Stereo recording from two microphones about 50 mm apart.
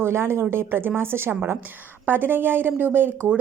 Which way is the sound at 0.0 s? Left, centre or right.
Right.